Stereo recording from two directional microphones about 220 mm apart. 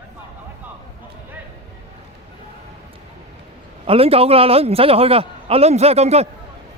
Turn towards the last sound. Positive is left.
turn(degrees=-30)  # may be behind; listen again after turning